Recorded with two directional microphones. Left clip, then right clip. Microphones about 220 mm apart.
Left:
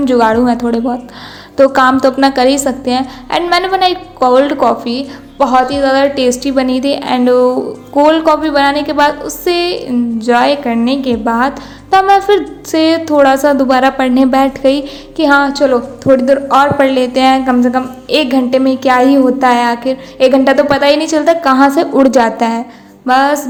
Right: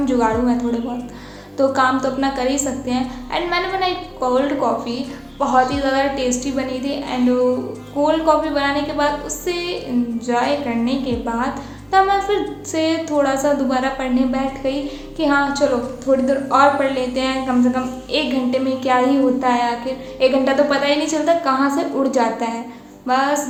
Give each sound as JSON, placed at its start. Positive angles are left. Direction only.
{"t": 0.0, "sound": "a woman's voice", "side_deg": 40}